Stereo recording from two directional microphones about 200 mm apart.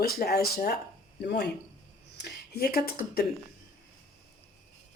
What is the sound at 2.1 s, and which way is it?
Speech, 55° left (ahead or behind).